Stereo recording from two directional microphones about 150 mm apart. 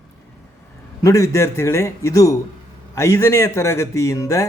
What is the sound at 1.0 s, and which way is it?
A man's voice, 20° left (ahead or behind).